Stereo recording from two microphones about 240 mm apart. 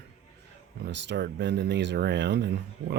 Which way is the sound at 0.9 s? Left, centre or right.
Right.